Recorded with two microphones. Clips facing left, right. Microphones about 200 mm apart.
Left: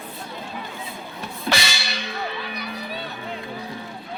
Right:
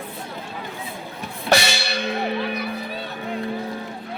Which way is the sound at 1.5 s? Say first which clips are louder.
Right 6 dB; 40° right (ahead or behind).